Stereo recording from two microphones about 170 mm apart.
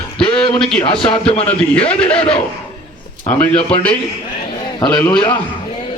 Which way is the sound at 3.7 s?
5° left (ahead or behind).